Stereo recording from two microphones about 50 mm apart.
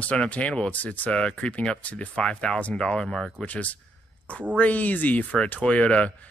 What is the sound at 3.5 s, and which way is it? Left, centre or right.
Speech, left.